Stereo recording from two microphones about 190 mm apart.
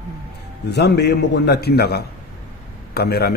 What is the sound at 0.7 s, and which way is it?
A man's voice, 60° left (ahead or behind).